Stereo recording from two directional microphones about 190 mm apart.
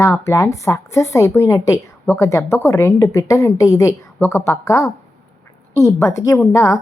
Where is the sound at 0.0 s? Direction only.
15° left (ahead or behind).